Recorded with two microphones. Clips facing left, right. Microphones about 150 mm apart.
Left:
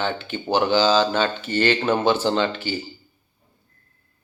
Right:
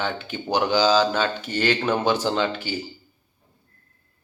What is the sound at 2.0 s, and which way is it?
Speech, 10° right (ahead or behind).